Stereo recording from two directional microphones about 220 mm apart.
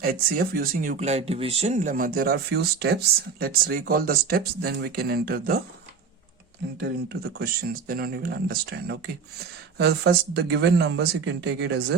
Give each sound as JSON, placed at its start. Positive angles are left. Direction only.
{"t": 0.0, "sound": "speech", "side_deg": -40}
{"t": 6.8, "sound": "speech", "side_deg": -45}